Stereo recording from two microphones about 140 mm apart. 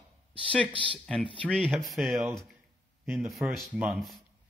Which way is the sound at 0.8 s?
5° left (ahead or behind).